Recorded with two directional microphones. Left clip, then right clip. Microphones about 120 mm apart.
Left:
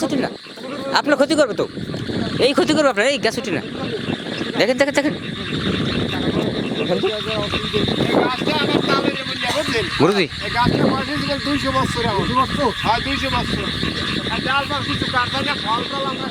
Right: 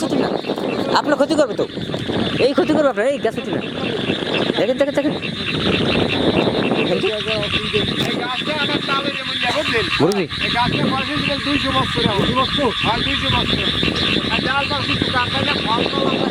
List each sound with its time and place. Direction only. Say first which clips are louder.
0.9 s speech: left 1 dB; 5° left (ahead or behind)
4.6 s speech: left 4 dB; 15° left (ahead or behind)
5.6 s a sound: right 5 dB; 50° right (ahead or behind)
8.1 s speech: left 3 dB; 35° left (ahead or behind)
10.0 s speech: left 6 dB; 35° left (ahead or behind)
12.4 s speech: right 1 dB; 25° left (ahead or behind)